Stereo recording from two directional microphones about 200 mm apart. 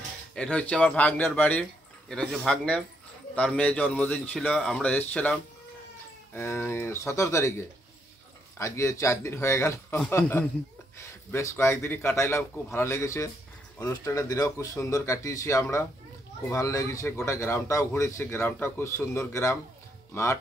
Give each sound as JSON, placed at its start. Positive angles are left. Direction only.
{"t": 0.3, "sound": "speech", "side_deg": 5}